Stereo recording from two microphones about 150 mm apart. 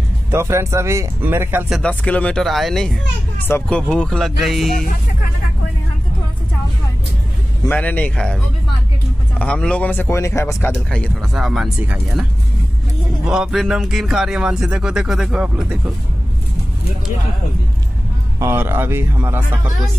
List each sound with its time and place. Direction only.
0.3 s speech: 15° right (ahead or behind)
1.7 s speech: 5° left (ahead or behind)
7.6 s speech: 10° left (ahead or behind)
9.4 s speech: 5° left (ahead or behind)
10.9 s speech: 5° left (ahead or behind)
13.3 s speech: centre (ahead or behind)
18.4 s speech: 15° right (ahead or behind)